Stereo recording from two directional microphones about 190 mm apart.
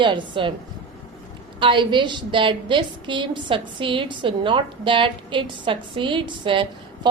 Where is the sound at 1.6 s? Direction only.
25° right (ahead or behind).